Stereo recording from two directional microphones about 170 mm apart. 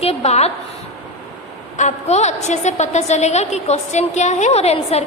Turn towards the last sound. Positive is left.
turn(degrees=40)  # may be behind; listen again after turning